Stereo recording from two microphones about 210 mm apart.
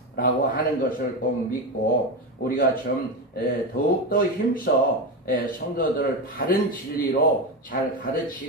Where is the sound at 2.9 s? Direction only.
45° left (ahead or behind).